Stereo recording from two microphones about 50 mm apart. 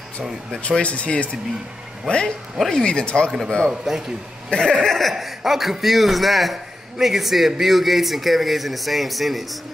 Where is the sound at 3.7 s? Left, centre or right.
Centre.